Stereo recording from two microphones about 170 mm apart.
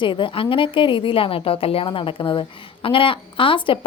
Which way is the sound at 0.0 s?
30° left (ahead or behind).